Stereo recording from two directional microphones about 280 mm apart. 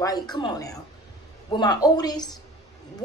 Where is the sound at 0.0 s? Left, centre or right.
Centre.